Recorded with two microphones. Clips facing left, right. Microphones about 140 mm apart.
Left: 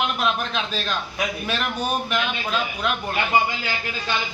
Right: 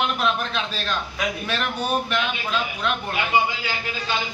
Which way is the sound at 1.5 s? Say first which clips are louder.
Right 1 dB; 5° left (ahead or behind).